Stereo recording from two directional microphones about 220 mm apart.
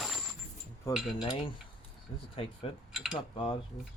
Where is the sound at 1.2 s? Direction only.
20° left (ahead or behind).